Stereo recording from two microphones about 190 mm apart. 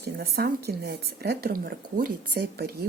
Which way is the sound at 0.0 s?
55° right (ahead or behind).